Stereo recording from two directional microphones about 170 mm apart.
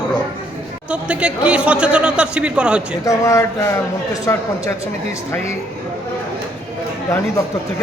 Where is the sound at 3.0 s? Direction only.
15° left (ahead or behind).